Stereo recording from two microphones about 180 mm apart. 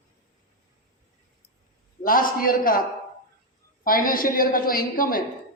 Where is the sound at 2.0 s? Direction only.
50° left (ahead or behind).